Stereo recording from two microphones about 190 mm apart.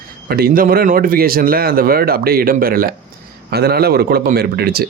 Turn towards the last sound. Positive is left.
turn(degrees=-55)  # may be behind; listen again after turning